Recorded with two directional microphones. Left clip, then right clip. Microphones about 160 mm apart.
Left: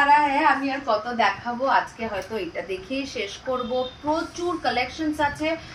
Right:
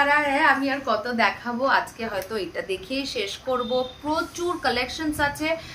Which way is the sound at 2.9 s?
35° right (ahead or behind).